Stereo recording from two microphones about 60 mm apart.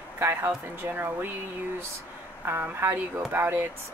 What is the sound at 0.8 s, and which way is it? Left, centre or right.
Speech, right.